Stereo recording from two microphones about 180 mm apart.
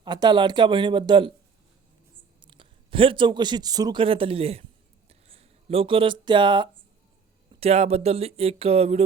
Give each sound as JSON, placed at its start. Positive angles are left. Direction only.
{"t": 0.0, "sound": "speech", "side_deg": -25}
{"t": 2.4, "sound": "a man's voice", "side_deg": -25}
{"t": 5.0, "sound": "a sound", "side_deg": -35}
{"t": 7.5, "sound": "speech", "side_deg": -35}